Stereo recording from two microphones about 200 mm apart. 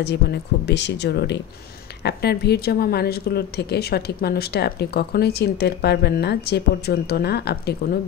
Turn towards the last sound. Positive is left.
turn(degrees=55)  # may be behind; listen again after turning